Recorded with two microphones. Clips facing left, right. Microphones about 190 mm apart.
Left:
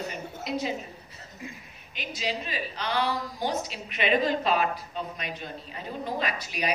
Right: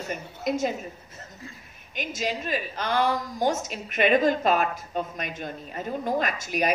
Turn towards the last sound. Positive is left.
turn(degrees=-45)  # may be behind; listen again after turning